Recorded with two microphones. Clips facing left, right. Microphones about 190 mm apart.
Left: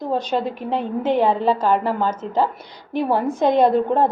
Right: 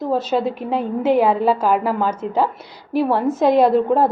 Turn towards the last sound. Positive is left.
turn(degrees=-5)  # may be behind; listen again after turning